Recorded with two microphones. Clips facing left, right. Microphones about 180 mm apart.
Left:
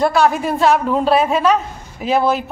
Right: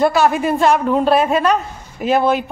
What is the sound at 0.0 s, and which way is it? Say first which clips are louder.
A man's voice: right 1 dB; centre (ahead or behind).